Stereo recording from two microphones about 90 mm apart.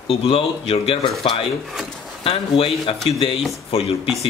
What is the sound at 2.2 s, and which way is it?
Speech, 90° left.